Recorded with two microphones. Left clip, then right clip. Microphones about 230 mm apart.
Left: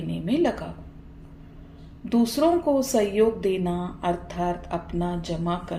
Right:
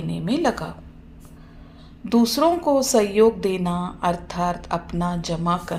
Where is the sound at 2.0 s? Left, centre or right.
Right.